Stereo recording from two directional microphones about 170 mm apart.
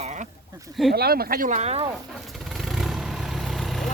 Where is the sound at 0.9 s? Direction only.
65° right (ahead or behind); by 1.8 s 40° right (ahead or behind).